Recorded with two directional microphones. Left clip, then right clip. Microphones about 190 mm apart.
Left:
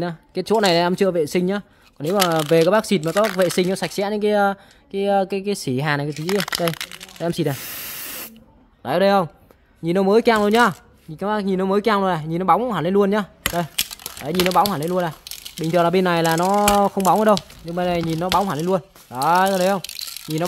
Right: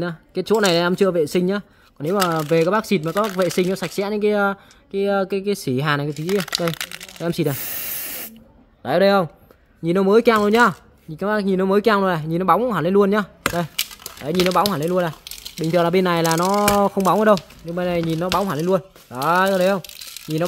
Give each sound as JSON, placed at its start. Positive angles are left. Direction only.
{"t": 0.0, "sound": "speech", "side_deg": 5}
{"t": 6.1, "sound": "speech", "side_deg": 30}
{"t": 6.8, "sound": "snake", "side_deg": 0}
{"t": 8.8, "sound": "speech", "side_deg": 0}